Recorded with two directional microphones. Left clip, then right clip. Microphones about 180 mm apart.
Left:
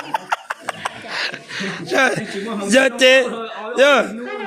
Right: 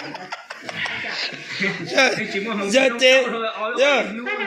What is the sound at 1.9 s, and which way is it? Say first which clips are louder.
A man's voice: left 2 dB; 60° left (ahead or behind).